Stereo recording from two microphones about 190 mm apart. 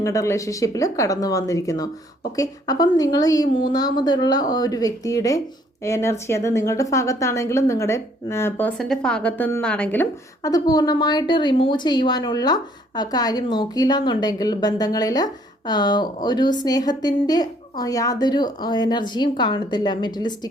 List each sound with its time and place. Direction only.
0.0 s a woman's voice: 15° left (ahead or behind)